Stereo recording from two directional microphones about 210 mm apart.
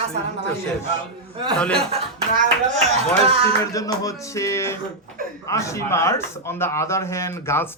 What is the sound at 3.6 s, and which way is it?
Speech, 15° left (ahead or behind).